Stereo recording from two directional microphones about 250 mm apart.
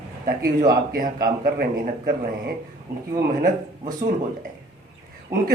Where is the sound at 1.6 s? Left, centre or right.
Right.